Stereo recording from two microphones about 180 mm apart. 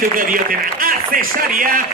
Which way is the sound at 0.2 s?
50° right (ahead or behind).